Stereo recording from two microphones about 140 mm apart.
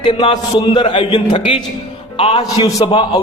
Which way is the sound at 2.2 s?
45° left (ahead or behind).